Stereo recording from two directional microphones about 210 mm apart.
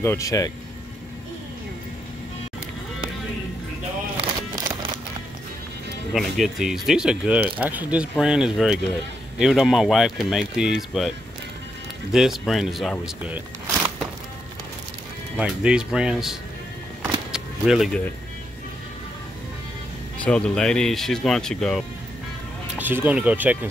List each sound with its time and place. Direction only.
0.0 s speech: 15° left (ahead or behind)
4.2 s a sound: 25° right (ahead or behind)
6.1 s speech: centre (ahead or behind)
12.1 s speech: centre (ahead or behind)
15.3 s speech: 5° right (ahead or behind)
17.0 s power windows: 5° right (ahead or behind)
20.2 s speech: 5° left (ahead or behind)
22.8 s speech: 10° right (ahead or behind)